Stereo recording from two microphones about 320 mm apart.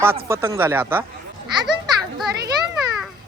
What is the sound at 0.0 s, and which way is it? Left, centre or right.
A man's voice, centre.